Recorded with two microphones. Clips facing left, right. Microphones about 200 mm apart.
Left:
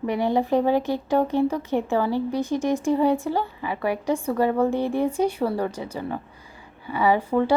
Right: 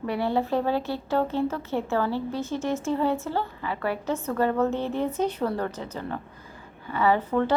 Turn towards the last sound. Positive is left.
turn(degrees=10)  # may be behind; listen again after turning